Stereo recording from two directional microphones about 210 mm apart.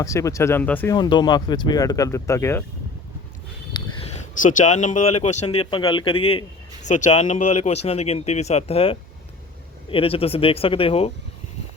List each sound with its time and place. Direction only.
0.0 s speech: 15° left (ahead or behind)
0.9 s speech: 20° left (ahead or behind)
4.4 s speech: 40° left (ahead or behind)